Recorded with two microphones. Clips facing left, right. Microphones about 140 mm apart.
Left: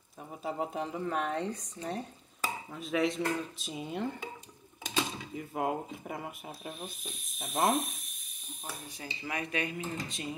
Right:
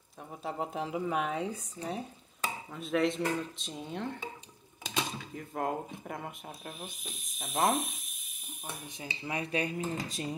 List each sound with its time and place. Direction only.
0.4 s speech: centre (ahead or behind)
5.3 s speech: 5° left (ahead or behind)
8.6 s speech: 20° right (ahead or behind); by 10.3 s 35° right (ahead or behind)